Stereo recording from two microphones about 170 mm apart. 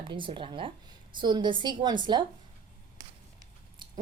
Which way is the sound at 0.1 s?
30° right (ahead or behind).